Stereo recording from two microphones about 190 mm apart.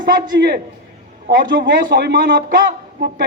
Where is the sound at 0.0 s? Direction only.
55° right (ahead or behind).